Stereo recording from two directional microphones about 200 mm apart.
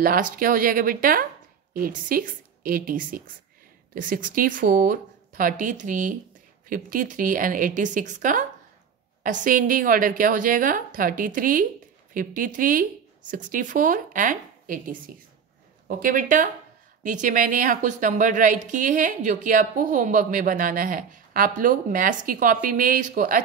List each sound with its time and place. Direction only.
0.0 s a woman's voice: 45° right (ahead or behind)